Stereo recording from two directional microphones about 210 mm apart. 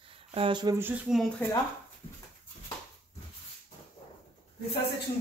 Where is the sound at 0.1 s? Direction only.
25° right (ahead or behind); by 1.3 s centre (ahead or behind).